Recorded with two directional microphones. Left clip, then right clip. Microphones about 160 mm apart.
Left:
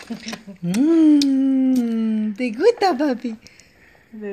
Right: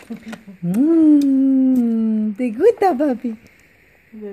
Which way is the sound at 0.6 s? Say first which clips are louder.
Right 1 dB; 55° right (ahead or behind).